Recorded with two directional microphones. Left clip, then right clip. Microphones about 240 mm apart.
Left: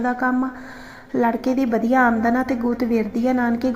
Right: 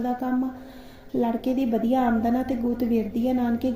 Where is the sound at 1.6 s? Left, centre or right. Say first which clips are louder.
Left 6 dB; left.